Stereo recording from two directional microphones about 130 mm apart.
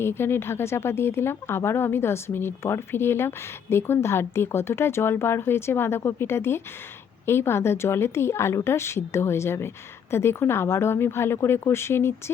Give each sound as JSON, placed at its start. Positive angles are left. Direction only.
{"t": 0.0, "sound": "speech", "side_deg": 20}